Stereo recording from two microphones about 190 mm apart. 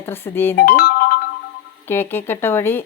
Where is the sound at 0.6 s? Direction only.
55° left (ahead or behind).